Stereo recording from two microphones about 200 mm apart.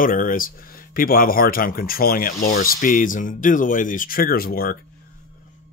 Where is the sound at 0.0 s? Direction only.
45° left (ahead or behind).